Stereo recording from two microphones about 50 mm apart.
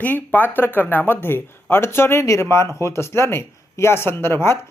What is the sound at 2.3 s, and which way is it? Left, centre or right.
Speech, left.